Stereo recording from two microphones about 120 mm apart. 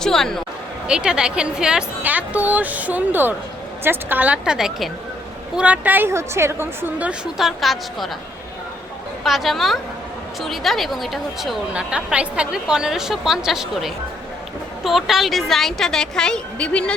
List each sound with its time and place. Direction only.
0.0 s speech: 5° left (ahead or behind)
0.9 s a woman's voice: 5° right (ahead or behind)
9.2 s a woman's voice: centre (ahead or behind)